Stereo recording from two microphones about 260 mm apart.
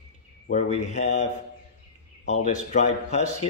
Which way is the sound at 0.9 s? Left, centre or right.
Left.